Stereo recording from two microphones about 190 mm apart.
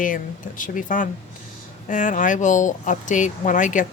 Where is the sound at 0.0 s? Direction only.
45° left (ahead or behind).